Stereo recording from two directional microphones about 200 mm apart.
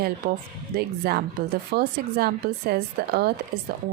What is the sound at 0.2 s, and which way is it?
Speech, 35° right (ahead or behind).